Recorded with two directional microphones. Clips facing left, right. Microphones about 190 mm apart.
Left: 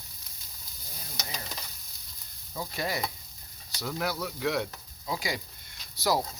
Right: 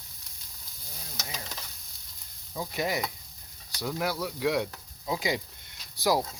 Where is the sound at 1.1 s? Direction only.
Centre (ahead or behind).